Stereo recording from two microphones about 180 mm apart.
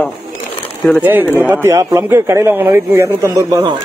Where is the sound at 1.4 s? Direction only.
15° right (ahead or behind).